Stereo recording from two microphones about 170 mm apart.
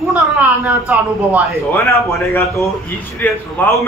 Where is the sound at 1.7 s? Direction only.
15° left (ahead or behind).